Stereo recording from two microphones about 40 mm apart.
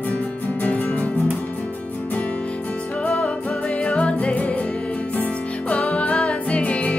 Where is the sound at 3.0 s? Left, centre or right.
Left.